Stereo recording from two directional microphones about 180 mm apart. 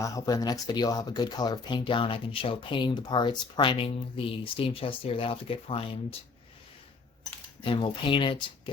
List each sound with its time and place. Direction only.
0.0 s speech: 20° left (ahead or behind)
7.6 s speech: 30° left (ahead or behind)